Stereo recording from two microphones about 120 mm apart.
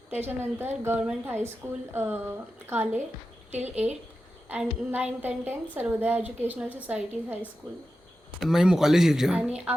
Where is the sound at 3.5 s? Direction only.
65° right (ahead or behind).